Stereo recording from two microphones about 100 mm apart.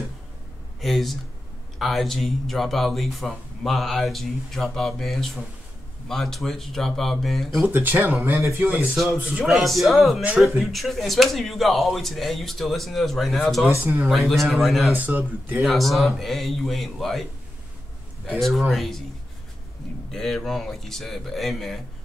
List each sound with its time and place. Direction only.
0.7 s speech: centre (ahead or behind)
7.6 s speech: 20° right (ahead or behind)
8.6 s speech: centre (ahead or behind)
14.9 s speech: 20° right (ahead or behind)
15.6 s speech: centre (ahead or behind)
18.3 s speech: centre (ahead or behind)
20.1 s speech: 5° left (ahead or behind)